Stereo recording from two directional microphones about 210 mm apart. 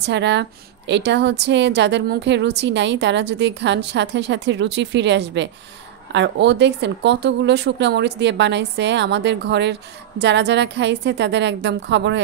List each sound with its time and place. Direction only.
0.0 s speech: 55° right (ahead or behind)